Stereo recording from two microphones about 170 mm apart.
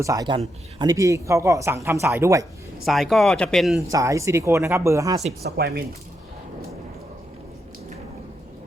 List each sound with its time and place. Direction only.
0.0 s speech: 20° right (ahead or behind)
2.8 s speech: centre (ahead or behind)
3.8 s speech: 20° right (ahead or behind)
5.4 s speech: 70° right (ahead or behind)